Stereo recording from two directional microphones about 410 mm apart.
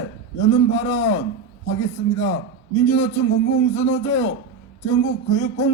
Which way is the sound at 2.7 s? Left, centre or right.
Centre.